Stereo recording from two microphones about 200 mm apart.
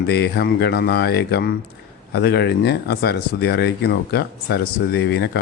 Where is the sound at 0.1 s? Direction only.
55° left (ahead or behind).